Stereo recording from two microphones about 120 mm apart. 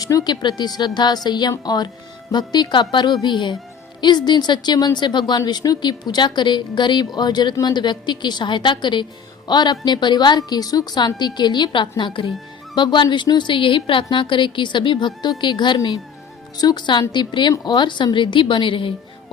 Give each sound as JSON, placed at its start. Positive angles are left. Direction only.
{"t": 0.0, "sound": "a woman's voice", "side_deg": 30}